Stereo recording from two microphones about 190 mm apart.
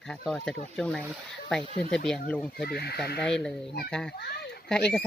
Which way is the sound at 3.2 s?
5° left (ahead or behind).